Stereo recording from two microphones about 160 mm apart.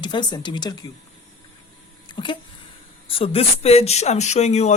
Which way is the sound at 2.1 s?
30° left (ahead or behind).